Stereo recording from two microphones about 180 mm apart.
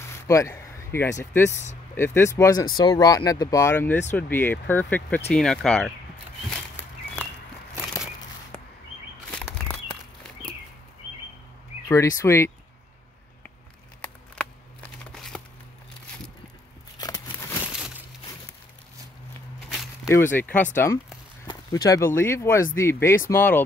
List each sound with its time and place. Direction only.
0.3 s speech: 15° left (ahead or behind)
6.5 s walk: 10° left (ahead or behind)
9.3 s bird flight: 5° left (ahead or behind)
11.9 s speech: 15° left (ahead or behind)
14.0 s a sound: 5° left (ahead or behind)
17.0 s a sound: 20° left (ahead or behind)
17.7 s crumpling: 5° right (ahead or behind)
20.1 s speech: 10° left (ahead or behind)
21.5 s speech: 20° left (ahead or behind)